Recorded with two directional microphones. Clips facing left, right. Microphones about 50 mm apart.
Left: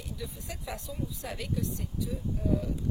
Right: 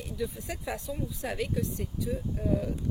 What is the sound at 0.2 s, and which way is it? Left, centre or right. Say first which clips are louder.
Speech: right 10 dB; right.